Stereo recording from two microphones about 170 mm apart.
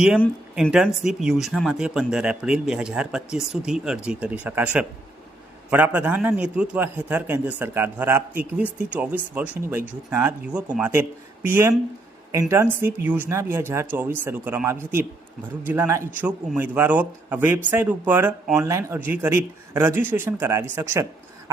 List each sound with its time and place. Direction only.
0.5 s a man's voice: 5° right (ahead or behind)